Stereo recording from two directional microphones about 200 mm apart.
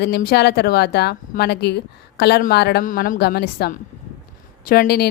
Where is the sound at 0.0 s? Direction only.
50° left (ahead or behind).